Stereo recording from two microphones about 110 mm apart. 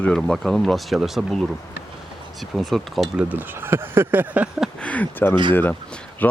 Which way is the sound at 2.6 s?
Centre (ahead or behind).